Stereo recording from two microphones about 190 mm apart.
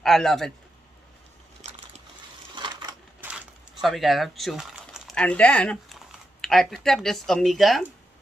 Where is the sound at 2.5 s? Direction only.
25° right (ahead or behind).